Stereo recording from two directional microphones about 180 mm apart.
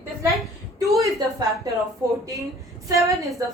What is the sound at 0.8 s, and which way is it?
Speech, 20° right (ahead or behind).